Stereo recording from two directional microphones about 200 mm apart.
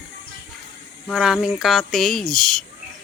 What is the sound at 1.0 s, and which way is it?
Speech, centre (ahead or behind).